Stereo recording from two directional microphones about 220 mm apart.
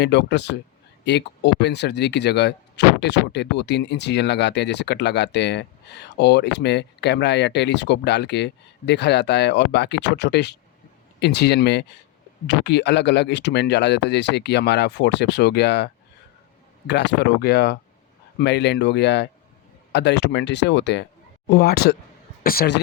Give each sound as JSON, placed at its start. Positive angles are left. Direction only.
{"t": 0.0, "sound": "speech", "side_deg": 50}